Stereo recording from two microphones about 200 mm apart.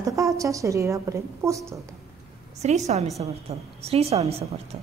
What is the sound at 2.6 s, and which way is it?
A woman's voice, 35° right (ahead or behind).